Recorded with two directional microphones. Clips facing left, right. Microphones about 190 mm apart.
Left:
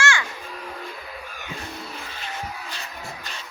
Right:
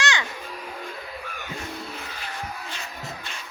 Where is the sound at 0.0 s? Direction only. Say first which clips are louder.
Left 2 dB; 20° right (ahead or behind).